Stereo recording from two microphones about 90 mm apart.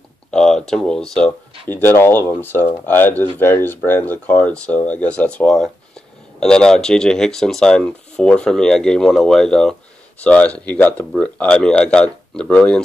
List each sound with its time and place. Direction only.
0.3 s speech: 5° left (ahead or behind)
1.7 s speech: 25° left (ahead or behind)